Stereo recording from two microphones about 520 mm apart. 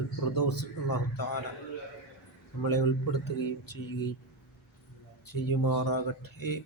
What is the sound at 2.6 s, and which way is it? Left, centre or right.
A man's voice, left.